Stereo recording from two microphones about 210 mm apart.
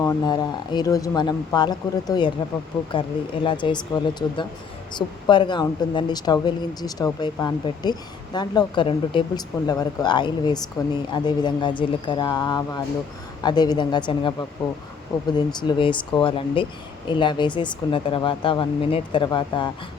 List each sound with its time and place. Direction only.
0.0 s a woman's voice: 15° left (ahead or behind)
3.4 s a woman's voice: 20° left (ahead or behind)